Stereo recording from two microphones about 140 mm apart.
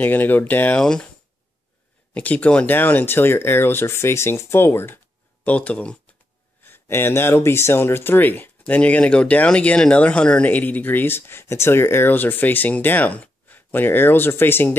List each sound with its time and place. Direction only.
0.0 s speech: 10° left (ahead or behind)
2.1 s speech: 10° left (ahead or behind)